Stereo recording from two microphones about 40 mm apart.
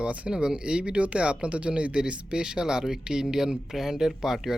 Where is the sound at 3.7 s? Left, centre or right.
Centre.